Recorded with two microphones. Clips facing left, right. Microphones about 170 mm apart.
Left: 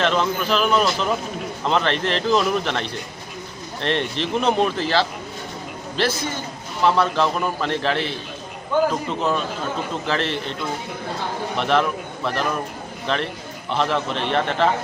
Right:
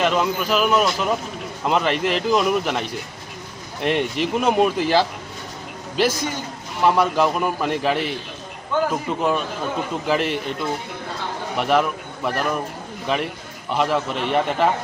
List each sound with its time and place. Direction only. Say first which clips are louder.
0.0 s a man's voice: right 1 dB; 10° right (ahead or behind)
11.5 s a man's voice: right 1 dB; 10° right (ahead or behind)